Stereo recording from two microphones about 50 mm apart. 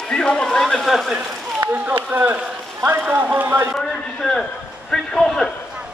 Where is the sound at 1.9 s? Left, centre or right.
Right.